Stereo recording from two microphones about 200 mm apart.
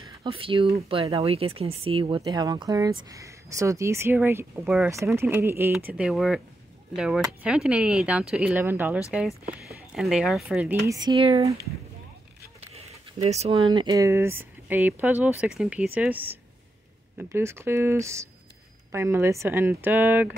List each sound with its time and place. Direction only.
0.2 s speech: 25° right (ahead or behind); by 11.0 s 10° right (ahead or behind)
11.0 s speech: 25° right (ahead or behind)
12.7 s speech: 35° right (ahead or behind); by 20.3 s 10° right (ahead or behind)